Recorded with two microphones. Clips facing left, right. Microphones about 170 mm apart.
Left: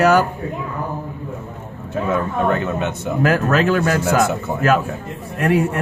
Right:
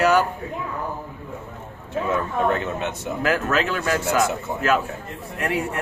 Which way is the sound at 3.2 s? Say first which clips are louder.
Left 5 dB; 45° left (ahead or behind).